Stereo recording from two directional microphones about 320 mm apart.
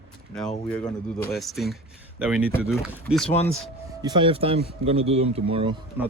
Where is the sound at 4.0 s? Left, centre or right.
Centre.